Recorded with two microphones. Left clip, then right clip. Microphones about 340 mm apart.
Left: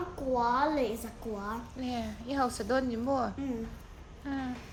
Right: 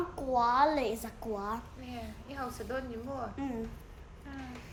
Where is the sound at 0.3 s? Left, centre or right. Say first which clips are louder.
Right 2 dB; centre.